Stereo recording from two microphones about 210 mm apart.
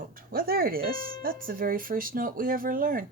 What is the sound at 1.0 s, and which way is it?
Speech, 20° left (ahead or behind).